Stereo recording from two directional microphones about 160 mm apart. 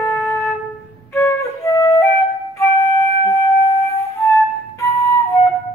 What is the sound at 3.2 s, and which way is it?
Wind instrument, 20° left (ahead or behind).